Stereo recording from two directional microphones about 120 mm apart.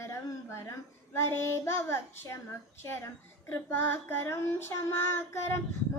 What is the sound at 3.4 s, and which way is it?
Child singing, 20° left (ahead or behind).